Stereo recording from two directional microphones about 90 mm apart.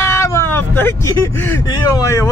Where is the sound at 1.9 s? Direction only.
35° left (ahead or behind).